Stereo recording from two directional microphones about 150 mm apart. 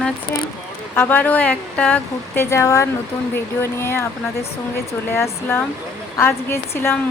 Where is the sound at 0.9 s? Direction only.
10° left (ahead or behind).